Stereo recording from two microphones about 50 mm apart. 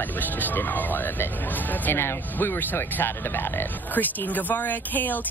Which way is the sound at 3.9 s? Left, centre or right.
Left.